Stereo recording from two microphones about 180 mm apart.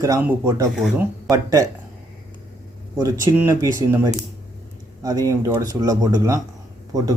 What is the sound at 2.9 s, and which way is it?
Speech, 20° right (ahead or behind).